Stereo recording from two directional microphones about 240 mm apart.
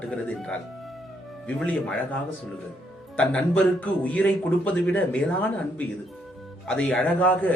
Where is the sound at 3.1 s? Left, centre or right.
Centre.